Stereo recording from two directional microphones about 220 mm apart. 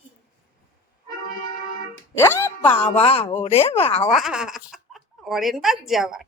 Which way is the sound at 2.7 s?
25° left (ahead or behind).